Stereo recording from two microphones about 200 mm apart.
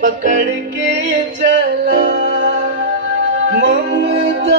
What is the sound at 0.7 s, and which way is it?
Music, 60° right (ahead or behind).